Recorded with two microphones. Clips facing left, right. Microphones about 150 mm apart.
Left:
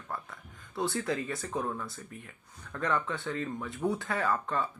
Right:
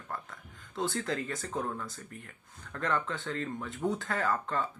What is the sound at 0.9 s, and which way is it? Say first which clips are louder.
Speech: left 1 dB; 20° left (ahead or behind).